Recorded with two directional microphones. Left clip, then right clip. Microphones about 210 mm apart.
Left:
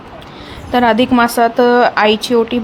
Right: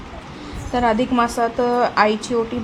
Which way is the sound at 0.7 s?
30° left (ahead or behind).